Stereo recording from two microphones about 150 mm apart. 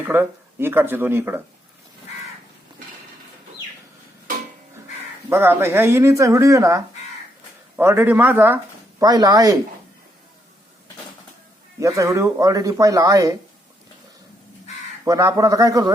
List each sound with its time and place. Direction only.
0.0 s speech: 15° right (ahead or behind)
5.3 s speech: 15° right (ahead or behind)
9.0 s speech: 25° right (ahead or behind)
11.8 s speech: 20° right (ahead or behind)
15.0 s speech: 20° right (ahead or behind)